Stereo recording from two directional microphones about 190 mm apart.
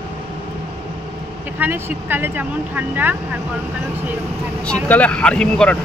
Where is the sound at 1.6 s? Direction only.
10° right (ahead or behind).